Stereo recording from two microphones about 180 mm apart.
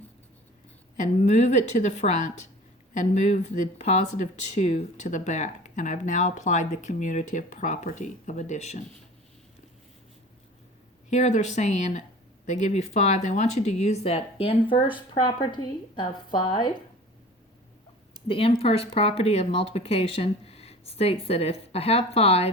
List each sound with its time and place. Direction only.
0.9 s speech: 40° left (ahead or behind)
11.1 s speech: 40° left (ahead or behind); by 16.7 s 25° left (ahead or behind)
18.3 s speech: 30° left (ahead or behind)